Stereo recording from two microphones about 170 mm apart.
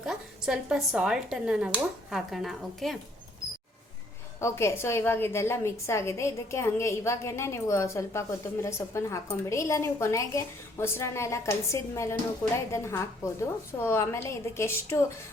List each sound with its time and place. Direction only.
0.0 s speech: 5° right (ahead or behind)
4.4 s a woman's voice: 15° left (ahead or behind)